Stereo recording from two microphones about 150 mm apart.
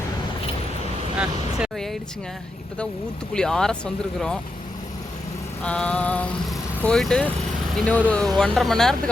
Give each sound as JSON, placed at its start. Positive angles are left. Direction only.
{"t": 1.2, "sound": "speech", "side_deg": -5}
{"t": 3.3, "sound": "speech", "side_deg": 5}
{"t": 5.6, "sound": "mantra", "side_deg": 5}
{"t": 6.8, "sound": "speech", "side_deg": 5}